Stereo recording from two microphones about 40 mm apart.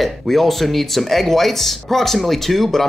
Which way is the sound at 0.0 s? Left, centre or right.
Centre.